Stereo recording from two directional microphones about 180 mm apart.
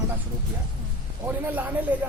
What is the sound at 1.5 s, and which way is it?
Speech, 10° right (ahead or behind).